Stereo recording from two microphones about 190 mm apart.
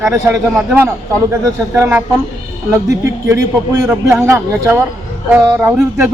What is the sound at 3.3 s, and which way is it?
Speech, 15° right (ahead or behind).